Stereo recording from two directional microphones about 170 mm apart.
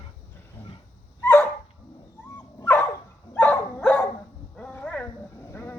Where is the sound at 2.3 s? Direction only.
20° left (ahead or behind).